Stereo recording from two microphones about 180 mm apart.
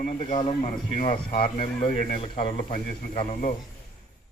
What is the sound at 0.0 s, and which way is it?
Speech, 35° left (ahead or behind).